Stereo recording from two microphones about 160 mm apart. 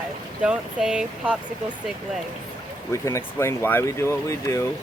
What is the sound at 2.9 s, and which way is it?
Speech, 20° left (ahead or behind).